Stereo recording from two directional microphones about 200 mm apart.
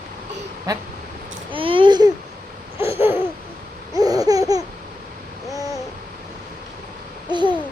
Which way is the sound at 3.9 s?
20° right (ahead or behind).